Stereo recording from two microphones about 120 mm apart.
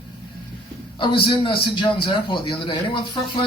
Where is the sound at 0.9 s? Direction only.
45° left (ahead or behind).